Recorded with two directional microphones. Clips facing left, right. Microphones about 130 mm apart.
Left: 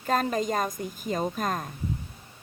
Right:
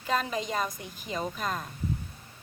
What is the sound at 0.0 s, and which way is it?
Speech, 45° left (ahead or behind).